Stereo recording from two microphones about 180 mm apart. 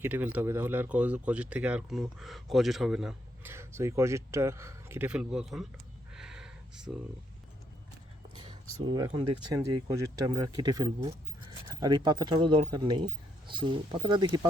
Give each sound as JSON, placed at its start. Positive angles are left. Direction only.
{"t": 0.0, "sound": "speech", "side_deg": -10}
{"t": 3.5, "sound": "speech", "side_deg": -15}
{"t": 6.1, "sound": "a sound", "side_deg": -5}
{"t": 8.4, "sound": "speech", "side_deg": -25}